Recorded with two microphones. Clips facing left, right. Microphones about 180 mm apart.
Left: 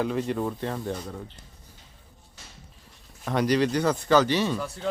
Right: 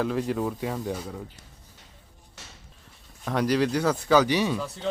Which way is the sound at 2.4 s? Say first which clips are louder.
Right 3 dB; 75° right (ahead or behind).